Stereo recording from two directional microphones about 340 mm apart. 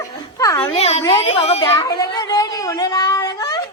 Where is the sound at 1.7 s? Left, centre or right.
Centre.